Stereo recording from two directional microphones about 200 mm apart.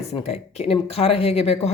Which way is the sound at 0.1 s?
30° left (ahead or behind).